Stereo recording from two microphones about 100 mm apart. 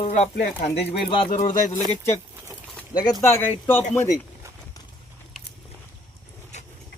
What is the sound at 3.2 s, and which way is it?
Speech, 25° left (ahead or behind).